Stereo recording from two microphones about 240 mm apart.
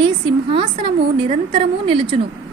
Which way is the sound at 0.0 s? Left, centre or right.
Right.